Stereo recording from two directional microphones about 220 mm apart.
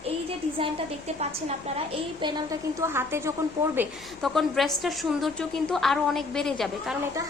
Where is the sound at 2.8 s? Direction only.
10° right (ahead or behind).